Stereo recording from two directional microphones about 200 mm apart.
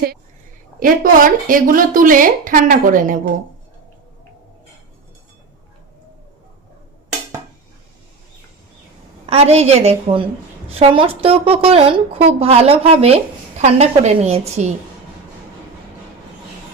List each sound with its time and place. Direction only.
0.8 s speech: 45° right (ahead or behind)
9.2 s a woman's voice: 30° right (ahead or behind)